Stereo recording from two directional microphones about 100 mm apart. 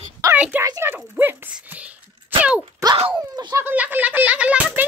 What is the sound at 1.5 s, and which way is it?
Whispering, 15° right (ahead or behind).